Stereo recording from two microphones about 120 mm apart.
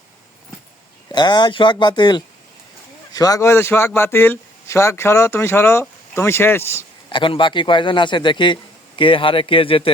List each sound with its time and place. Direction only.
1.1 s a man's voice: 35° left (ahead or behind); by 6.8 s 20° left (ahead or behind)
7.1 s a man's voice: 45° left (ahead or behind)